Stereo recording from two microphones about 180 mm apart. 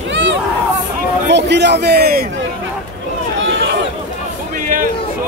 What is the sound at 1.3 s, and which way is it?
Speech, 75° right (ahead or behind).